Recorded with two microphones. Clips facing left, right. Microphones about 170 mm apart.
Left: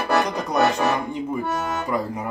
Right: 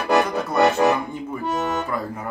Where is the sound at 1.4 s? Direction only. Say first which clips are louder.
Right 2 dB; 15° right (ahead or behind).